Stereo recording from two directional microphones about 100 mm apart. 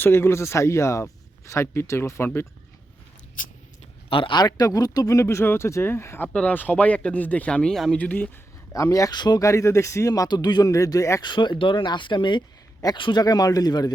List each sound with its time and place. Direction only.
0.0 s speech: 25° left (ahead or behind)
4.1 s speech: 55° left (ahead or behind); by 8.3 s 15° left (ahead or behind)
8.7 s speech: 35° left (ahead or behind)
9.4 s speech: 30° left (ahead or behind)
11.2 s speech: 50° left (ahead or behind)